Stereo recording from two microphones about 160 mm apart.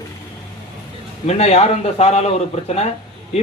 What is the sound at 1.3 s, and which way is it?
A man's voice, 40° left (ahead or behind).